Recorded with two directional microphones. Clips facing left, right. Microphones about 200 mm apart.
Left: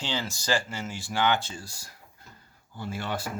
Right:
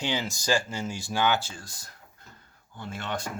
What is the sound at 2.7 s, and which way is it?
Speech, 5° left (ahead or behind).